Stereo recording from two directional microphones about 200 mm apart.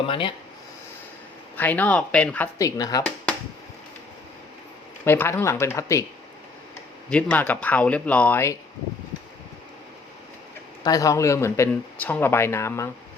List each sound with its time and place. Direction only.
0.1 s speech: 25° left (ahead or behind)
1.5 s speech: 10° left (ahead or behind)
5.0 s speech: 10° left (ahead or behind)
7.1 s speech: 5° left (ahead or behind)
10.8 s speech: 15° left (ahead or behind)